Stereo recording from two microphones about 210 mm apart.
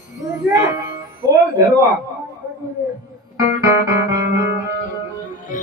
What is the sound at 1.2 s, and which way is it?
Music, 15° right (ahead or behind).